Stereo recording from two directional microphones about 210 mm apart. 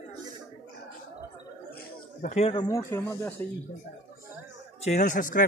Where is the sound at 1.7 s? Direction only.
45° left (ahead or behind); by 2.6 s 30° left (ahead or behind).